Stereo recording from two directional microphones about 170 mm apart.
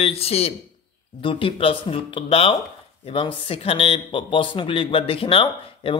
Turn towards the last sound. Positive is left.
turn(degrees=30)  # may be behind; listen again after turning